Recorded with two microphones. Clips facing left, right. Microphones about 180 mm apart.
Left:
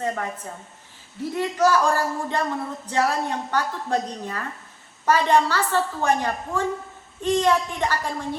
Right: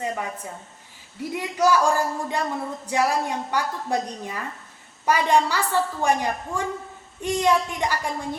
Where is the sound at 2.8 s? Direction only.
10° right (ahead or behind).